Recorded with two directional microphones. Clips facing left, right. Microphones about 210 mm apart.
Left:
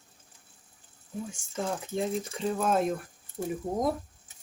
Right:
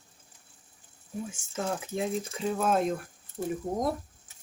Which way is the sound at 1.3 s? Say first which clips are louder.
Even; 5° right (ahead or behind).